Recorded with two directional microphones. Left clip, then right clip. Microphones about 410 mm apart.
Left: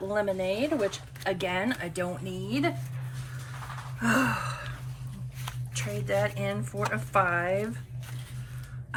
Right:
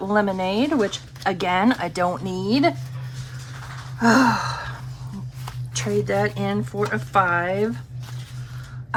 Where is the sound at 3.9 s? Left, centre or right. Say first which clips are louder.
Right 9 dB; centre.